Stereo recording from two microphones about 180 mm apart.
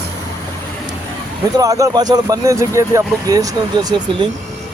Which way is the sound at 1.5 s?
20° right (ahead or behind).